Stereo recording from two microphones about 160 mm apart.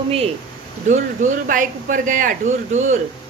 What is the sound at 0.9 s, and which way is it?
Speech, 50° right (ahead or behind).